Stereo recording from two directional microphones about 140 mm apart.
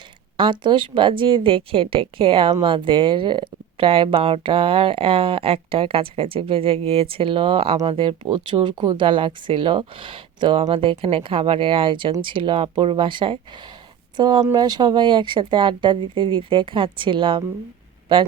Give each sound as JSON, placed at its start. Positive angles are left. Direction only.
{"t": 0.3, "sound": "speech", "side_deg": -35}